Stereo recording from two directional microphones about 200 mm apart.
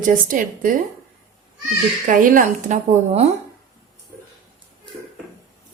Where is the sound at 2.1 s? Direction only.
40° right (ahead or behind).